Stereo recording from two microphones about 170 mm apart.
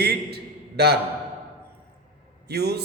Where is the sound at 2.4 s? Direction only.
70° right (ahead or behind).